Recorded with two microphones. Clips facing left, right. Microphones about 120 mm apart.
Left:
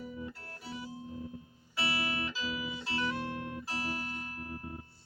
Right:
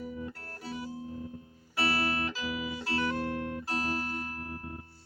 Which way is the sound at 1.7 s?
50° right (ahead or behind).